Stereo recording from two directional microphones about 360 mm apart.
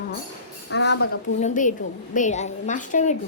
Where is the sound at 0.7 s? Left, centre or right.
Left.